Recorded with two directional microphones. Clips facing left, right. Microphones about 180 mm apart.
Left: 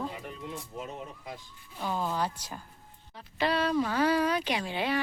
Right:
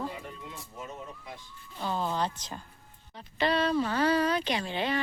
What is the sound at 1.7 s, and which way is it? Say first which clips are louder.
Speech: even; 10° left (ahead or behind).